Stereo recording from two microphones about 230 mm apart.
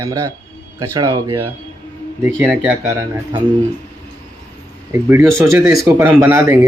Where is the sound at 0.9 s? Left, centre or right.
Centre.